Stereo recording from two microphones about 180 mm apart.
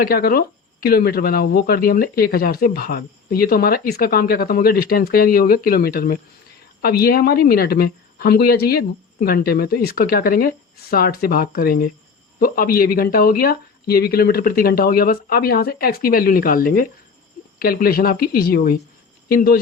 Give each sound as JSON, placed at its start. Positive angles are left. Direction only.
{"t": 0.0, "sound": "speech", "side_deg": 55}